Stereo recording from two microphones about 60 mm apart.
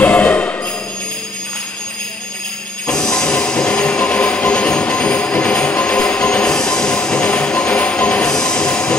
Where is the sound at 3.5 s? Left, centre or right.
Centre.